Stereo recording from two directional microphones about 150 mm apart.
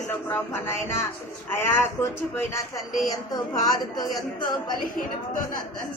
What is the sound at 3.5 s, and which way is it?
Speech, 25° left (ahead or behind).